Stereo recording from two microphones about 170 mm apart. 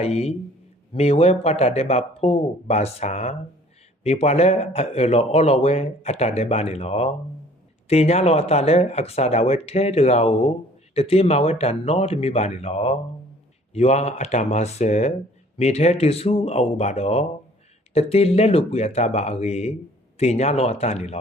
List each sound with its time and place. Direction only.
0.0 s a man's voice: 40° left (ahead or behind)